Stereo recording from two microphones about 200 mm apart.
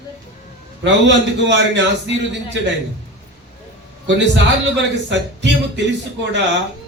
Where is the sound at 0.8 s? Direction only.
60° right (ahead or behind).